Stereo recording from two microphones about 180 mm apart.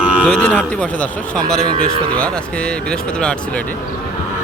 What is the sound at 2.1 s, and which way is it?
Speech, 5° left (ahead or behind).